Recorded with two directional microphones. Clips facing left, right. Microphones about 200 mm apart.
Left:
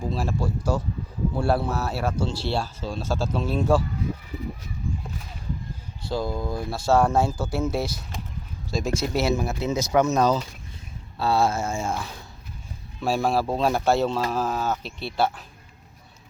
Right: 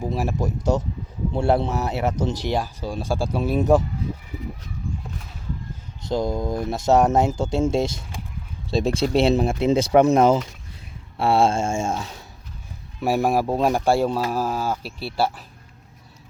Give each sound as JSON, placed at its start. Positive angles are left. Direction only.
{"t": 0.0, "sound": "speech", "side_deg": -15}
{"t": 6.1, "sound": "speech", "side_deg": -20}